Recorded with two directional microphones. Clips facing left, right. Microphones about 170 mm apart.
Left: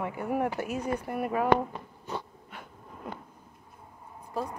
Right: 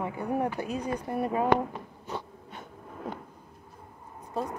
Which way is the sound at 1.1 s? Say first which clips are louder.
Right 2 dB; 25° right (ahead or behind).